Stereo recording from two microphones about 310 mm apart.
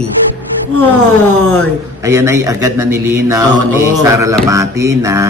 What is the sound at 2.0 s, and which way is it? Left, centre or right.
Speech, centre.